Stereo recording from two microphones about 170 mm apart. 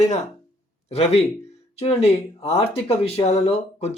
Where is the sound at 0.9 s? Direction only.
40° left (ahead or behind).